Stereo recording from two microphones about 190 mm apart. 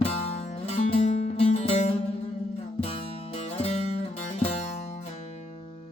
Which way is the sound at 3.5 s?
35° left (ahead or behind).